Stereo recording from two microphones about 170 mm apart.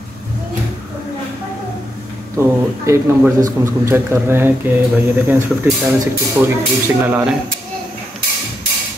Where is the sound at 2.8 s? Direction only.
15° right (ahead or behind).